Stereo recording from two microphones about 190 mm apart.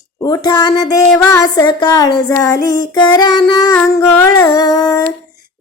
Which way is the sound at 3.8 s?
10° left (ahead or behind).